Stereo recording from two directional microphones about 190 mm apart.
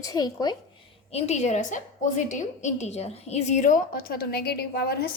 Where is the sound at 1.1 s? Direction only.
35° left (ahead or behind); by 5.0 s 55° left (ahead or behind).